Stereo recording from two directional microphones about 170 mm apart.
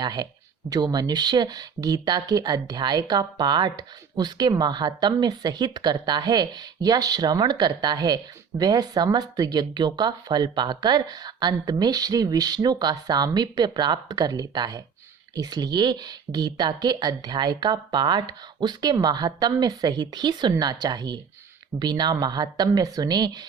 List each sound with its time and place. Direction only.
0.0 s speech: 25° right (ahead or behind)